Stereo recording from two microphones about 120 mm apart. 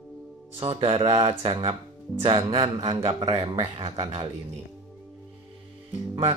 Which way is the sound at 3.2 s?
55° right (ahead or behind).